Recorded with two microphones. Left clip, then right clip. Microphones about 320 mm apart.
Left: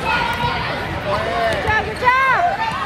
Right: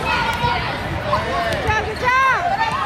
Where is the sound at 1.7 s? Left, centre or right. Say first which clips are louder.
Left 2 dB; left.